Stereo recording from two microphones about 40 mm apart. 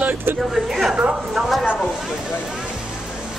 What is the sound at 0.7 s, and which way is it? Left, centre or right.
Speech, centre.